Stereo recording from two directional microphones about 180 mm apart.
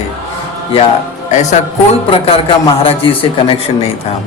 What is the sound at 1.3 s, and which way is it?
Music, 40° left (ahead or behind).